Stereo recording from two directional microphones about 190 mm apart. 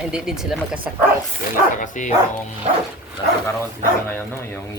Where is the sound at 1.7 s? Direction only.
40° left (ahead or behind).